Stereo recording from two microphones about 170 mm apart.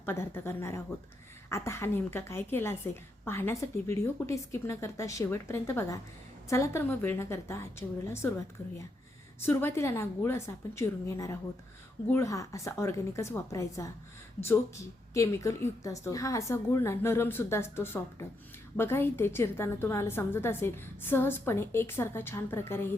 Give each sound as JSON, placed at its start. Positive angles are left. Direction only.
{"t": 0.0, "sound": "a woman's voice", "side_deg": 15}
{"t": 9.4, "sound": "a woman's voice", "side_deg": 15}
{"t": 15.1, "sound": "a woman's voice", "side_deg": 15}